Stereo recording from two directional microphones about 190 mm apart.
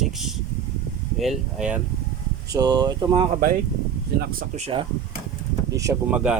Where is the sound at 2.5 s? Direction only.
20° right (ahead or behind).